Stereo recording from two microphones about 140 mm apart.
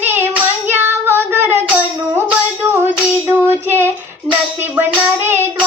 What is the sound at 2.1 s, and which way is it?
Music, 15° right (ahead or behind).